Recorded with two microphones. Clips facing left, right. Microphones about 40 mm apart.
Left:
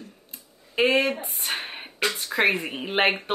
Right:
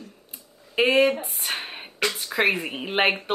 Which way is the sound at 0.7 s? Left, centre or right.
Centre.